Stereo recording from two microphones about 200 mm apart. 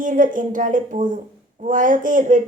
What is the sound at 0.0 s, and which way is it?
Speech, 40° right (ahead or behind).